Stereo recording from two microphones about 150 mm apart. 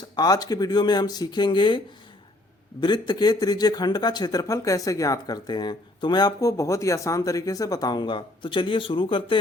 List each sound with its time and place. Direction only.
0.2 s speech: 25° left (ahead or behind)
2.8 s speech: 30° left (ahead or behind)